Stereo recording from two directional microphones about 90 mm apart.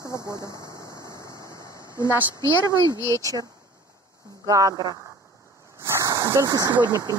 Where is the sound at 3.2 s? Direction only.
40° right (ahead or behind).